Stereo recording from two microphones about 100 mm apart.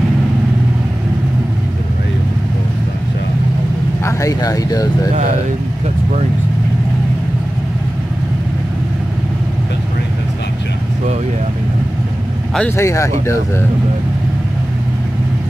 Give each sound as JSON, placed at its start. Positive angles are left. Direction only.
{"t": 4.0, "sound": "speech", "side_deg": 35}
{"t": 12.6, "sound": "speech", "side_deg": 30}